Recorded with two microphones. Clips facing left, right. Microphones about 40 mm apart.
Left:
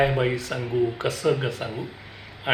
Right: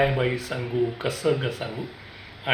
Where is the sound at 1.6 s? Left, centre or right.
Centre.